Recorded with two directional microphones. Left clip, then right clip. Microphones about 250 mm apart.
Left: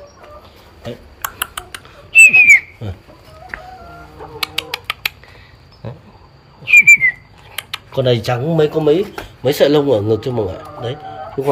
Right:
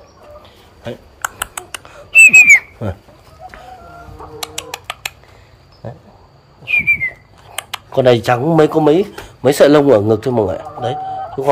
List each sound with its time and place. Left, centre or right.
0.8 s whistling: centre
4.4 s bird: centre
6.6 s whistling: centre
7.7 s a sound: centre
8.5 s speech: centre
9.8 s a man's voice: right
10.0 s speech: centre